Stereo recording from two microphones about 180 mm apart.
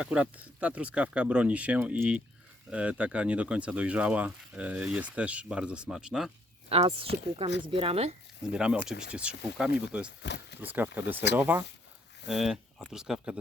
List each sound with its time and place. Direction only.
0.0 s speech: 5° right (ahead or behind)
6.7 s speech: 30° right (ahead or behind)
8.5 s speech: 5° right (ahead or behind)
10.2 s speech: 75° left (ahead or behind)
10.6 s speech: 10° right (ahead or behind)
12.3 s speech: centre (ahead or behind)